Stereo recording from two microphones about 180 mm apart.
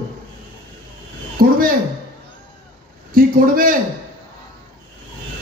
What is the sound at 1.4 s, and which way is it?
Speech, 50° right (ahead or behind).